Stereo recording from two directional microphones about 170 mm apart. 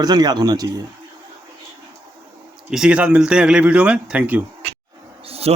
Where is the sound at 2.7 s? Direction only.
5° right (ahead or behind).